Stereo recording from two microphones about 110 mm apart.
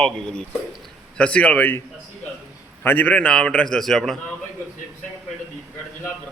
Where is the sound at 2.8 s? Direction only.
15° left (ahead or behind).